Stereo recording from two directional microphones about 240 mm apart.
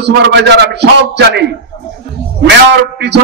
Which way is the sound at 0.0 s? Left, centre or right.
Right.